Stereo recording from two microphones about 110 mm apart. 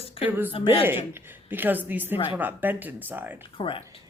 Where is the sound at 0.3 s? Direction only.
20° right (ahead or behind).